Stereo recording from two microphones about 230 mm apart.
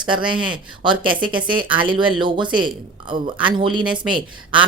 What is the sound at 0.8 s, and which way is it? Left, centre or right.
Speech, right.